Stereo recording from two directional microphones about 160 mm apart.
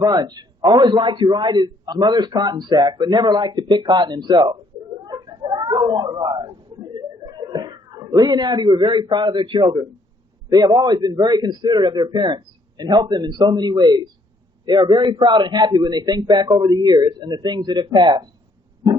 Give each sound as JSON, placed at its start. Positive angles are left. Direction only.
{"t": 0.0, "sound": "a man's voice", "side_deg": -25}
{"t": 5.0, "sound": "a sound", "side_deg": -25}
{"t": 10.5, "sound": "a man's voice", "side_deg": -25}